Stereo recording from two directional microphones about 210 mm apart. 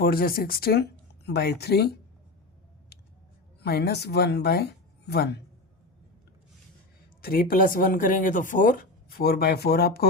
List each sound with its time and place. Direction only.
0.0 s speech: 45° left (ahead or behind)
2.9 s scissors: 50° left (ahead or behind)
3.6 s speech: 50° left (ahead or behind)
7.2 s speech: 45° left (ahead or behind)